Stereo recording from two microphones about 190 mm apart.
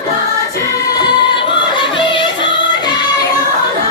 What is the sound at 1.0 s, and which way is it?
Music, 25° left (ahead or behind).